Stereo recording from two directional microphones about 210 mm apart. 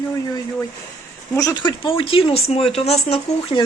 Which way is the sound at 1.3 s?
15° left (ahead or behind).